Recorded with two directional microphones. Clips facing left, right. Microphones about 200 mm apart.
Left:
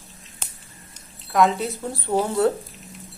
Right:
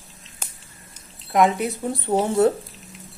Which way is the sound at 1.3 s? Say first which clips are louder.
Right 1 dB; 15° right (ahead or behind).